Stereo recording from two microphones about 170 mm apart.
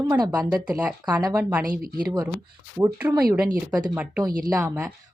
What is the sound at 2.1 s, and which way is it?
Speech, 10° right (ahead or behind).